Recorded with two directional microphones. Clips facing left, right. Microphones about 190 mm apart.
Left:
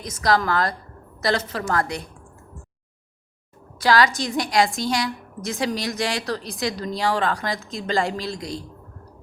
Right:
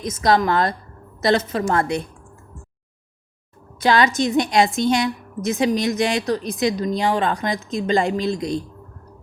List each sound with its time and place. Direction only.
0.0 s a woman's voice: 20° right (ahead or behind)
3.8 s a woman's voice: 20° right (ahead or behind)